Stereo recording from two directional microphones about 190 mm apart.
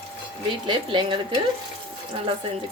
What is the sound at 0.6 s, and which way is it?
Speech, 25° right (ahead or behind).